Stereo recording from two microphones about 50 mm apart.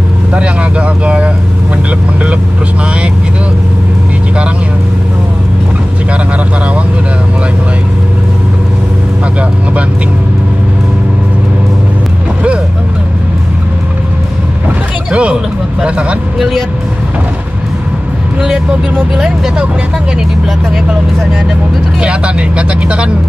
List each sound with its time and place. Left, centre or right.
0.3 s speech: right
15.0 s speech: right
16.3 s speech: centre
19.1 s speech: centre
22.0 s speech: right